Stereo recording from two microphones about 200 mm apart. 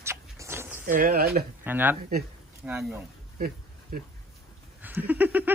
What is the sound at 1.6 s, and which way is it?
Speech, 10° right (ahead or behind).